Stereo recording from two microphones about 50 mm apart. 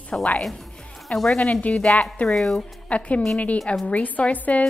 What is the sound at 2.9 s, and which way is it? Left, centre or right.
Speech, centre.